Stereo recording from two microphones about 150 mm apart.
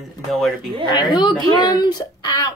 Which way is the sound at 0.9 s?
25° left (ahead or behind).